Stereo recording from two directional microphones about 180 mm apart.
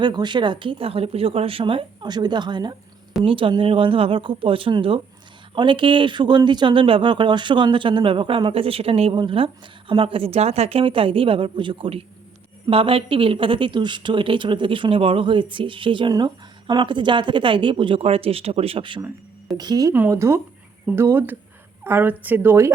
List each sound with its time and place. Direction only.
0.0 s speech: 25° right (ahead or behind)